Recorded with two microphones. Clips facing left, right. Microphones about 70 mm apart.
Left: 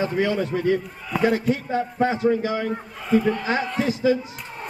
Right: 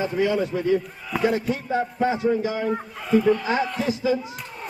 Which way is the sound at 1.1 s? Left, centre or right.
Centre.